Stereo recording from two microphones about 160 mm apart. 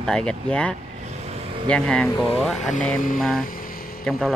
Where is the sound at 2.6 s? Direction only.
50° left (ahead or behind).